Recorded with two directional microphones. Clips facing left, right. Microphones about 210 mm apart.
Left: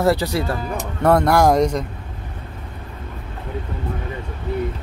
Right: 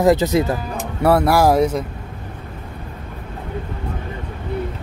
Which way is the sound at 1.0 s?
5° right (ahead or behind).